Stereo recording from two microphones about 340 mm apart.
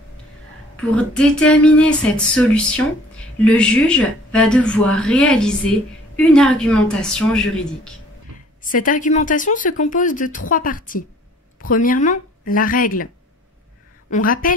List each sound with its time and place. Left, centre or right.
0.7 s speech: centre
8.6 s speech: left
14.1 s speech: left